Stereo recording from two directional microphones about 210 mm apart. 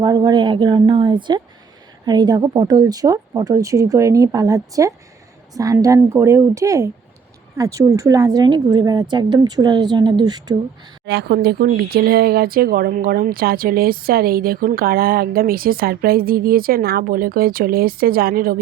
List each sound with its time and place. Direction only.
0.0 s a woman's voice: 20° right (ahead or behind)
11.0 s speech: 50° right (ahead or behind)